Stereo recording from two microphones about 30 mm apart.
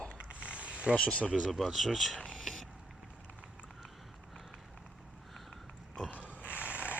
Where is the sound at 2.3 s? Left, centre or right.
Centre.